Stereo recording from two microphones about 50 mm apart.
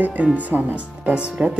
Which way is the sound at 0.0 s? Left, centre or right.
Right.